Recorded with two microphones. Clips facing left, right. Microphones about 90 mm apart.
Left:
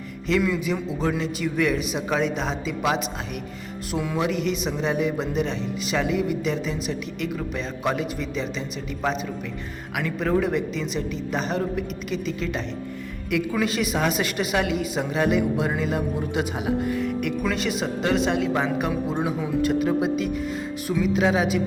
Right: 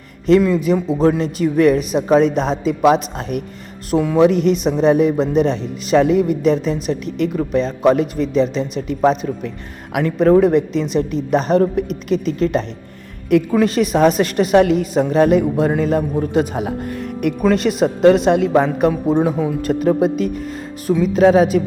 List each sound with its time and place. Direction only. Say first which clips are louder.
0.3 s a woman's voice: right 10 dB; 40° right (ahead or behind)
10.9 s a woman's voice: right 13 dB; 45° right (ahead or behind)
18.5 s a woman's voice: right 9 dB; 40° right (ahead or behind)